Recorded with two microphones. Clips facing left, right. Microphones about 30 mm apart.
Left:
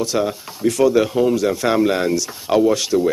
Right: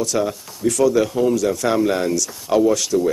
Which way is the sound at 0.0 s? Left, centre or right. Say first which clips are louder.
Left 1 dB; left.